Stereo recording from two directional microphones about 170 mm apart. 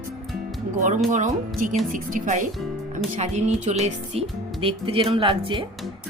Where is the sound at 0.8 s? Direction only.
50° right (ahead or behind).